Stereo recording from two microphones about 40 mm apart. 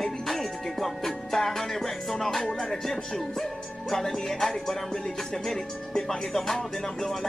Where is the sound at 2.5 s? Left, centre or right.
Centre.